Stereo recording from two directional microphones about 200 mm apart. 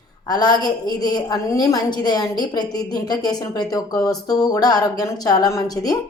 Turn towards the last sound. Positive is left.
turn(degrees=20)  # may be behind; listen again after turning